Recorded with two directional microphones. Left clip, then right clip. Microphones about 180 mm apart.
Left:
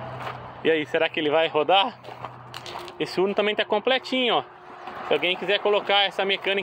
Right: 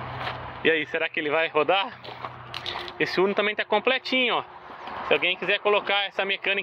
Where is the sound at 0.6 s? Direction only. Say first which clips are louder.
Left 2 dB; 20° left (ahead or behind).